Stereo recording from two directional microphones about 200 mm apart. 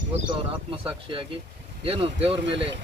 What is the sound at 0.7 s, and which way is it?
A man's voice, 25° right (ahead or behind).